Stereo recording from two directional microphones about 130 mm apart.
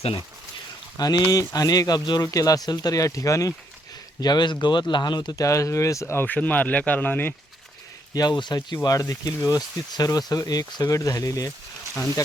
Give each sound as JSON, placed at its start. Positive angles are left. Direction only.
{"t": 0.9, "sound": "speech", "side_deg": 30}
{"t": 8.1, "sound": "speech", "side_deg": 30}